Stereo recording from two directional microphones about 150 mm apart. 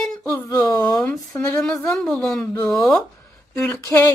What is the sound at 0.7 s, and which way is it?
Speech, 5° left (ahead or behind).